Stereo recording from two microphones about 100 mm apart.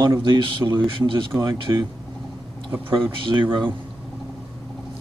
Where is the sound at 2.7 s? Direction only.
25° right (ahead or behind).